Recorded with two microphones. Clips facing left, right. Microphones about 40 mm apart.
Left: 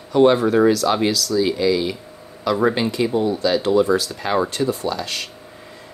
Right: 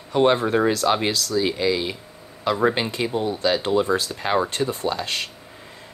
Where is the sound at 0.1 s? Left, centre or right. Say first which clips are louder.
Left 4 dB; right.